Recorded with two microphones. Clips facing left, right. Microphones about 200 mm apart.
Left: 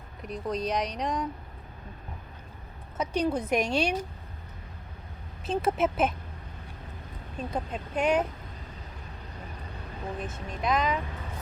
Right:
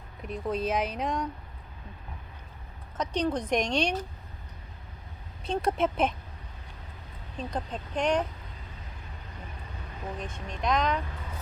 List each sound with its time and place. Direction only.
0.2 s speech: centre (ahead or behind)
3.0 s speech: 10° left (ahead or behind)
5.5 s speech: 5° left (ahead or behind)
7.3 s speech: 5° left (ahead or behind)
10.2 s speech: 5° left (ahead or behind)